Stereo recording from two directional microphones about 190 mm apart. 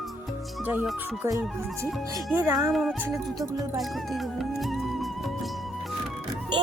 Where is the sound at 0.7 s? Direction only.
10° right (ahead or behind).